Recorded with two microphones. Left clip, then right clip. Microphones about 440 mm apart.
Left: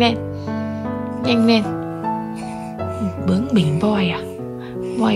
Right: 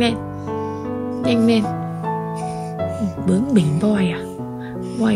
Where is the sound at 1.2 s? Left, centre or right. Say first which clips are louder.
Left 1 dB; centre.